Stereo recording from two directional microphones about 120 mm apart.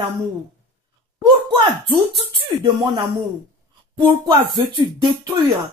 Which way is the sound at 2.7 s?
40° right (ahead or behind).